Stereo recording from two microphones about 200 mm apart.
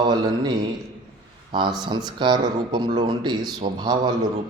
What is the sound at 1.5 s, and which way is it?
Speech, 25° right (ahead or behind).